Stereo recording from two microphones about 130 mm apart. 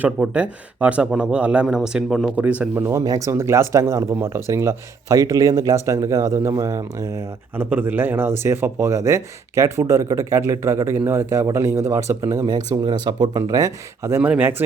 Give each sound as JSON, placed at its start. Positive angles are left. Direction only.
{"t": 0.0, "sound": "speech", "side_deg": -10}
{"t": 2.3, "sound": "speech", "side_deg": -10}
{"t": 2.8, "sound": "speech", "side_deg": -25}
{"t": 14.2, "sound": "speech", "side_deg": -10}